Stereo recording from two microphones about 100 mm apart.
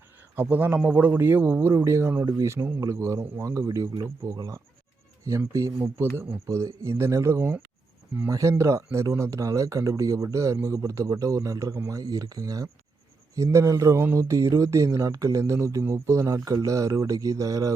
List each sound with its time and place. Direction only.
0.3 s a man's voice: 20° right (ahead or behind)